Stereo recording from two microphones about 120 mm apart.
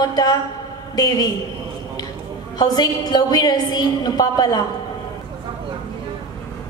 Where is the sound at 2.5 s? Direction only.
35° left (ahead or behind).